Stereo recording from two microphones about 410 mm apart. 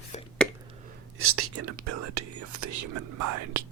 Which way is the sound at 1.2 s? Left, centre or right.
Right.